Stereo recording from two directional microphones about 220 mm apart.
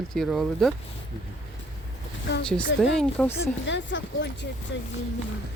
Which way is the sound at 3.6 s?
55° left (ahead or behind).